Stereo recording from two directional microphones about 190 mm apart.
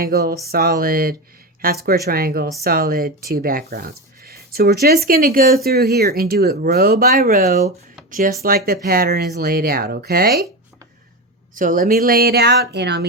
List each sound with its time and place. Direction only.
0.0 s speech: 55° right (ahead or behind)
11.5 s speech: 45° right (ahead or behind); by 13.1 s 60° right (ahead or behind)